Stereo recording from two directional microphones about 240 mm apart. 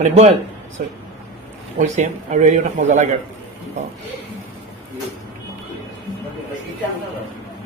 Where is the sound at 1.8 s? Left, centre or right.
Right.